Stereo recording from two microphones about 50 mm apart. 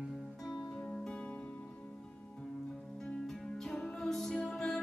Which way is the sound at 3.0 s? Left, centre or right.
Centre.